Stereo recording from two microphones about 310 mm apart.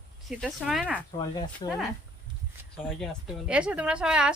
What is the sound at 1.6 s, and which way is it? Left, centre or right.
Speech, centre.